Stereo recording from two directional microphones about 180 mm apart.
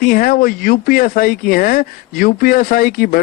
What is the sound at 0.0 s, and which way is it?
Speech, 50° left (ahead or behind).